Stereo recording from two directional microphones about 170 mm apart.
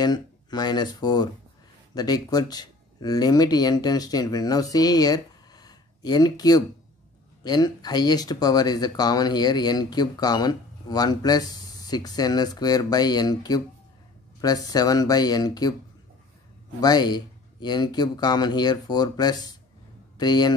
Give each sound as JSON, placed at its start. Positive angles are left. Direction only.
{"t": 0.0, "sound": "speech", "side_deg": 25}
{"t": 16.8, "sound": "speech", "side_deg": 25}